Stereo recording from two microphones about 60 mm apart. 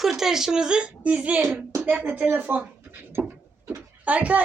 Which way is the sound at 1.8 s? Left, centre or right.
Right.